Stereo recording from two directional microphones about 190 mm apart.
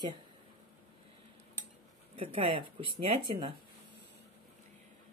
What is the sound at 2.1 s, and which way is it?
Speech, 30° right (ahead or behind).